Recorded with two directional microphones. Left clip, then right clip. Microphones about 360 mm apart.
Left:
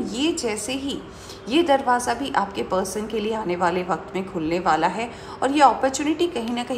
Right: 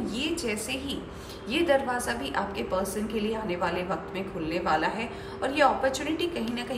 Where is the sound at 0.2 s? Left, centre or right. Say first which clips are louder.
Left 7 dB; centre.